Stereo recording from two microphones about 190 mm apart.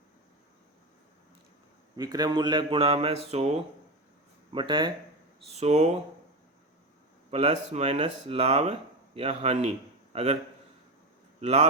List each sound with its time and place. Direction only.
2.0 s speech: 20° right (ahead or behind)
7.3 s a man's voice: 30° right (ahead or behind)
11.3 s a man's voice: 35° right (ahead or behind)